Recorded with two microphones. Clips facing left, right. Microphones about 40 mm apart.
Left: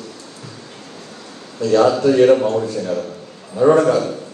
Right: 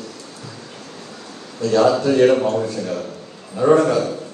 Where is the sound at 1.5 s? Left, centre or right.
Left.